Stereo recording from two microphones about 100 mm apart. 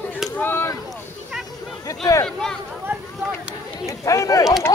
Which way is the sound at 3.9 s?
30° left (ahead or behind).